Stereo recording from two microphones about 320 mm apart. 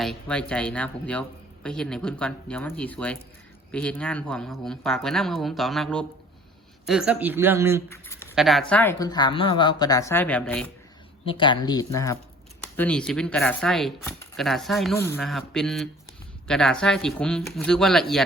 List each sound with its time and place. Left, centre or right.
0.0 s speech: centre
7.9 s speech: centre
11.3 s speech: centre